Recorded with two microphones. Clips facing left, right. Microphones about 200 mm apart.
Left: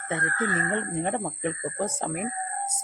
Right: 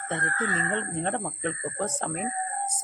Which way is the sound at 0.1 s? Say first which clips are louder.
Left 2 dB; 10° left (ahead or behind).